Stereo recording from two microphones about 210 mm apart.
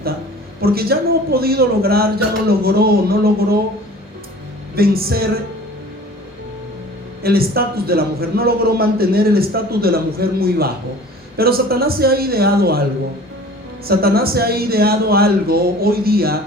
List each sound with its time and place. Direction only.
0.6 s a man's voice: 45° right (ahead or behind)
4.7 s a man's voice: 45° right (ahead or behind)
7.2 s a man's voice: 45° right (ahead or behind)
13.8 s a man's voice: 45° right (ahead or behind)